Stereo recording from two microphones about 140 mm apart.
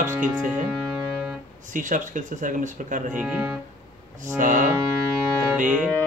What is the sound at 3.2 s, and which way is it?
Speech, 10° right (ahead or behind).